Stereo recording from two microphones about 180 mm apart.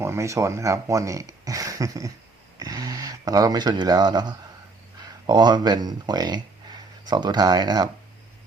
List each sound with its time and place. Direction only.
0.0 s speech: 15° right (ahead or behind)